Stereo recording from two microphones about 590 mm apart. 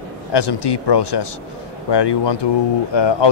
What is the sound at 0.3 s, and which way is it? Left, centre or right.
Speech, left.